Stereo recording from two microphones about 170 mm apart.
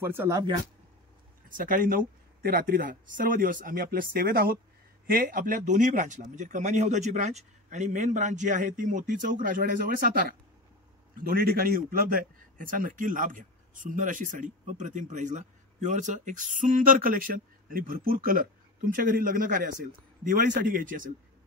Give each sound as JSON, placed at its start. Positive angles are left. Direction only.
{"t": 0.0, "sound": "speech", "side_deg": -15}
{"t": 1.5, "sound": "a man's voice", "side_deg": -55}
{"t": 11.2, "sound": "a man's voice", "side_deg": -60}